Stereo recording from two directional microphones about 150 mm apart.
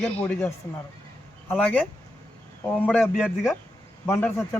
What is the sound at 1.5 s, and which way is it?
A man's voice, 5° left (ahead or behind).